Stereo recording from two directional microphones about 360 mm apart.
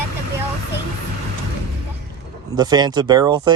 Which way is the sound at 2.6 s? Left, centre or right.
Centre.